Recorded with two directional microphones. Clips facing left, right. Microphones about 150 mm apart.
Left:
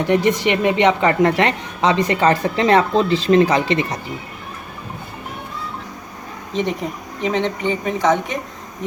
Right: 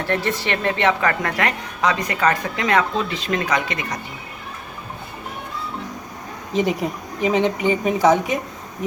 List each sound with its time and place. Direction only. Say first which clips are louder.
0.0 s a woman's voice: left 6 dB; 15° left (ahead or behind)
6.5 s speech: right 1 dB; 5° right (ahead or behind)